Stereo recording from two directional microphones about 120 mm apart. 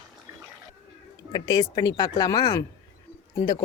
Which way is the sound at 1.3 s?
35° left (ahead or behind).